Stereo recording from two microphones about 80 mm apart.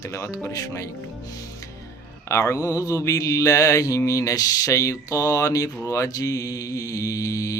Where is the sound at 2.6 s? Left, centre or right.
Left.